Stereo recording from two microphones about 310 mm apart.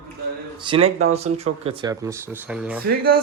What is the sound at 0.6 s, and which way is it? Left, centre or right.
Speech, centre.